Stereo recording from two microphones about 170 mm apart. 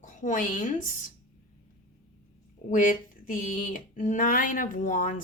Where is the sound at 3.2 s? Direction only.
55° left (ahead or behind).